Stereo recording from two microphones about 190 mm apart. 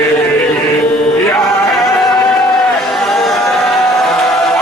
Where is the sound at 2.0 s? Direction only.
Centre (ahead or behind).